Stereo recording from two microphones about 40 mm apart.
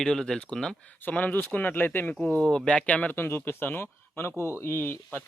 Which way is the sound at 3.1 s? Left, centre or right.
Left.